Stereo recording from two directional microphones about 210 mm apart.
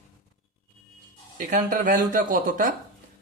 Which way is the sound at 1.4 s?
40° right (ahead or behind).